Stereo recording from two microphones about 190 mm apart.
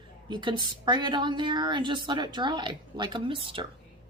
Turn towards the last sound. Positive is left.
turn(degrees=-25)  # may be behind; listen again after turning